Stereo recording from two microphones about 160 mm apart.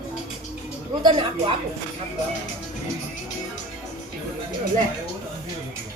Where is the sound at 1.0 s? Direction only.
30° right (ahead or behind).